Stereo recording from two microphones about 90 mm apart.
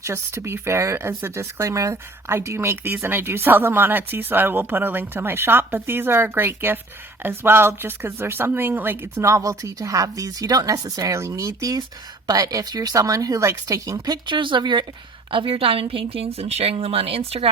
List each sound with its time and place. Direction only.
0.0 s speech: 30° right (ahead or behind)
14.3 s speech: 65° right (ahead or behind)
15.3 s a woman's voice: 80° right